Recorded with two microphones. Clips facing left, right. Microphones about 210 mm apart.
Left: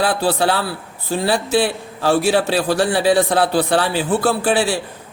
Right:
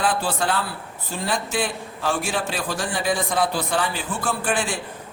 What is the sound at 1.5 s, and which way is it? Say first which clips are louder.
Speech: left 8 dB; 35° left (ahead or behind).